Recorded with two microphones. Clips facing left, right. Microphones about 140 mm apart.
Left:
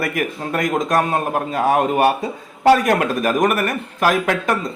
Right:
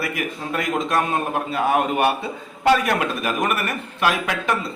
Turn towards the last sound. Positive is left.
turn(degrees=45)  # may be behind; listen again after turning